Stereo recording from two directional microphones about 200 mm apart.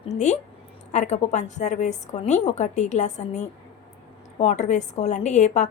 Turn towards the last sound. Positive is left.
turn(degrees=35)  # may be behind; listen again after turning